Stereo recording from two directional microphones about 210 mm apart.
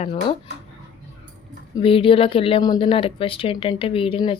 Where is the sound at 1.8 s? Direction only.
25° left (ahead or behind).